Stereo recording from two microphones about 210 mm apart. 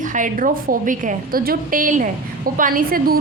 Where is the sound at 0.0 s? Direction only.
40° right (ahead or behind).